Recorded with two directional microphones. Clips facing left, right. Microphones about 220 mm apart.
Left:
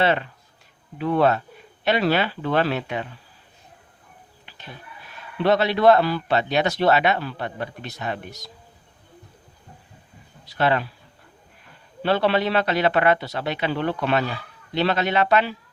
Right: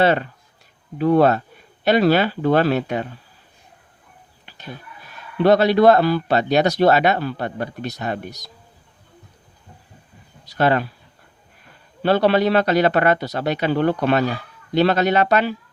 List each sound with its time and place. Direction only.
0.0 s a man's voice: 40° right (ahead or behind)
4.4 s a sound: 40° right (ahead or behind)
5.4 s a man's voice: 40° right (ahead or behind)
10.4 s speech: 45° right (ahead or behind)
12.0 s speech: 40° right (ahead or behind)